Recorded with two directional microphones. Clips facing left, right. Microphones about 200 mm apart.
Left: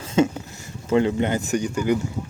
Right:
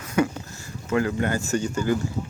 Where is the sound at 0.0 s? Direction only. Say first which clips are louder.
Left 3 dB; 25° left (ahead or behind).